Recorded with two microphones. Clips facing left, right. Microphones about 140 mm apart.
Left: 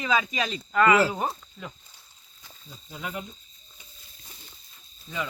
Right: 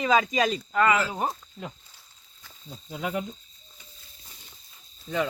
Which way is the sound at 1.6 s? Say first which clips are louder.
Right 2 dB; 25° right (ahead or behind).